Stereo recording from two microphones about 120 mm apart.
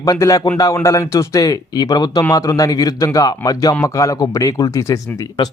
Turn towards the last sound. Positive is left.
turn(degrees=30)  # may be behind; listen again after turning